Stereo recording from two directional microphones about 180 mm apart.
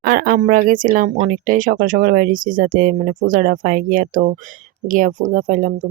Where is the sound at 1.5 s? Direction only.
50° right (ahead or behind).